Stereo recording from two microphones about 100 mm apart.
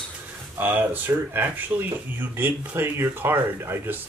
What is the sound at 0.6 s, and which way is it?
Speech, 20° right (ahead or behind).